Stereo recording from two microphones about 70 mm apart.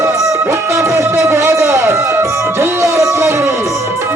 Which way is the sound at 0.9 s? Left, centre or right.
Right.